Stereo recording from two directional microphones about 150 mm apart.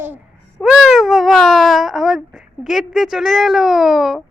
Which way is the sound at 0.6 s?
Centre (ahead or behind).